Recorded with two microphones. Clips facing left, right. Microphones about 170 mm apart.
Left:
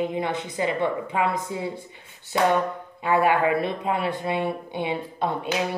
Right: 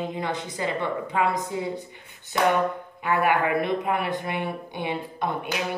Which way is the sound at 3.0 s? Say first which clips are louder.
Left 2 dB; 25° left (ahead or behind).